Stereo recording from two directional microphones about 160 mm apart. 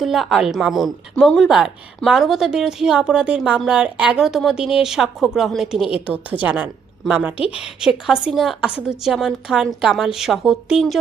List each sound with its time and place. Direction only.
0.0 s a woman's voice: centre (ahead or behind)
7.3 s a woman's voice: 35° left (ahead or behind)
7.6 s a woman's voice: 5° right (ahead or behind)